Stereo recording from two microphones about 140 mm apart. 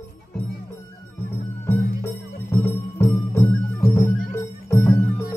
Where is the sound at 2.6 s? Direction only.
20° left (ahead or behind).